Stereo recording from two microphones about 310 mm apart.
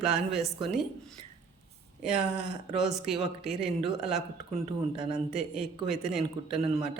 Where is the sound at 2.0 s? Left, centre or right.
Centre.